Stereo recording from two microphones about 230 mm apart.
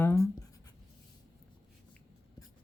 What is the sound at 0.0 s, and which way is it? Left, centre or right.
Writing, centre.